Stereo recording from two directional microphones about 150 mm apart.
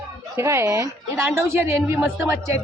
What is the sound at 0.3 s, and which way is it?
A woman's voice, 20° right (ahead or behind).